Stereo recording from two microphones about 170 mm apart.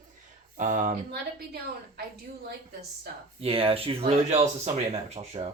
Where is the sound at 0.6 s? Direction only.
50° right (ahead or behind).